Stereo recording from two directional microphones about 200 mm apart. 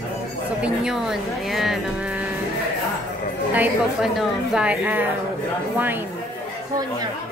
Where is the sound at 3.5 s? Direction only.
Centre (ahead or behind).